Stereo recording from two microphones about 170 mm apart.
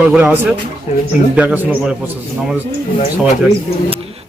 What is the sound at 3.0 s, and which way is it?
Speech, 45° left (ahead or behind).